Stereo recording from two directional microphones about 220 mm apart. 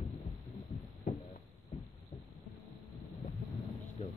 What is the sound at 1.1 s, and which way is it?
Heart sounds, 35° left (ahead or behind).